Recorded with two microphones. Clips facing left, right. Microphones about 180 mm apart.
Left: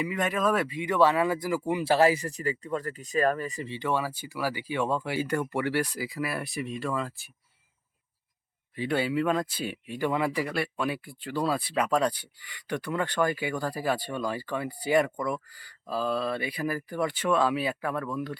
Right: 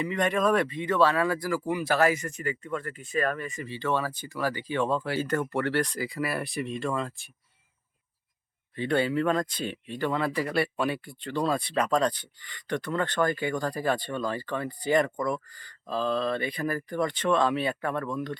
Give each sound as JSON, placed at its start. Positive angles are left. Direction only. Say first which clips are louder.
{"t": 0.0, "sound": "speech", "louder": "right 2 dB", "side_deg": 5}
{"t": 3.7, "sound": "speech", "louder": "right 1 dB", "side_deg": 15}
{"t": 8.7, "sound": "speech", "louder": "right 2 dB", "side_deg": 5}
{"t": 10.5, "sound": "speech", "louder": "right 3 dB", "side_deg": 0}